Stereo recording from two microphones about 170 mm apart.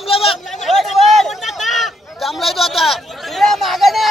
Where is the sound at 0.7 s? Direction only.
Centre (ahead or behind).